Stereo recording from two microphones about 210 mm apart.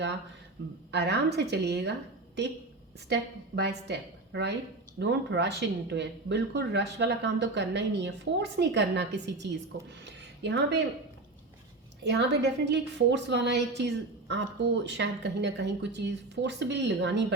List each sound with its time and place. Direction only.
0.9 s a woman's voice: 55° right (ahead or behind)
12.0 s a woman's voice: 55° right (ahead or behind)